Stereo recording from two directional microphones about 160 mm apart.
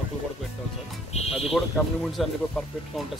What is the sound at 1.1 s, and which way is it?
Speech, 40° left (ahead or behind).